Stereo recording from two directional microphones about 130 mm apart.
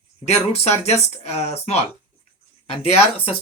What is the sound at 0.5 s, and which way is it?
Speech, 55° left (ahead or behind).